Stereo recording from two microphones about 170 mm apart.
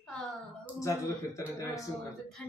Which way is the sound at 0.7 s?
20° left (ahead or behind).